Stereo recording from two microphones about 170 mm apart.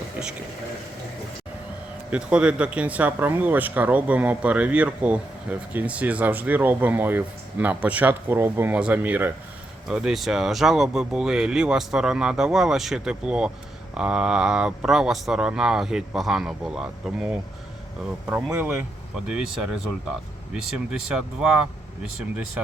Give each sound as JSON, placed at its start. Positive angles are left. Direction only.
{"t": 2.0, "sound": "speech", "side_deg": -5}